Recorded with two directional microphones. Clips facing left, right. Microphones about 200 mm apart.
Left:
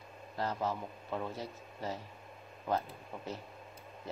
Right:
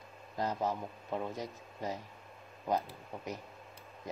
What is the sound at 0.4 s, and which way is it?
Speech, 15° right (ahead or behind).